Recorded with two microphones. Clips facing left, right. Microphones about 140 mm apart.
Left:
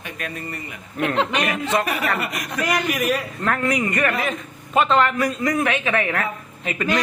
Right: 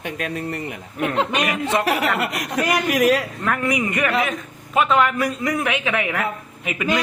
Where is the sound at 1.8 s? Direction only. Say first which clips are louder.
Right 3 dB; 75° right (ahead or behind).